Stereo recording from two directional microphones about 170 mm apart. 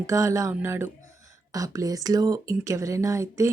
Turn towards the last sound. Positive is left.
turn(degrees=-20)  # may be behind; listen again after turning